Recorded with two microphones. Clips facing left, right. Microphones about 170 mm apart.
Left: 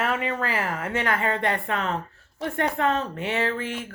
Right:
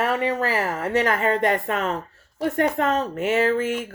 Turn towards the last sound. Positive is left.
turn(degrees=-40)  # may be behind; listen again after turning